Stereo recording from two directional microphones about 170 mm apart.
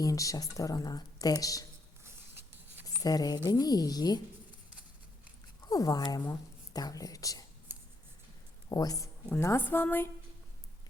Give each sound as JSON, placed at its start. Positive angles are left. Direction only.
{"t": 0.0, "sound": "speech", "side_deg": 20}
{"t": 2.8, "sound": "speech", "side_deg": 20}
{"t": 5.6, "sound": "speech", "side_deg": 20}
{"t": 8.7, "sound": "a woman's voice", "side_deg": 20}